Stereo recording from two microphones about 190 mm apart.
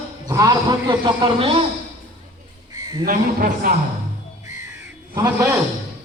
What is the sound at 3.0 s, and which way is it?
Speech, 50° right (ahead or behind).